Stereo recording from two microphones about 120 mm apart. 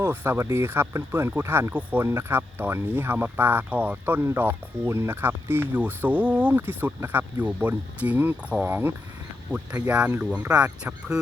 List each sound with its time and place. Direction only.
0.0 s speech: 20° right (ahead or behind)